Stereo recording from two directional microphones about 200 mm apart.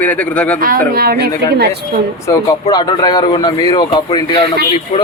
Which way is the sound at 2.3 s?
15° left (ahead or behind).